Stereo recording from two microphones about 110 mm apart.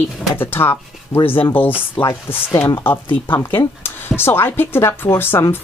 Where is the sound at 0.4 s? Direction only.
20° left (ahead or behind).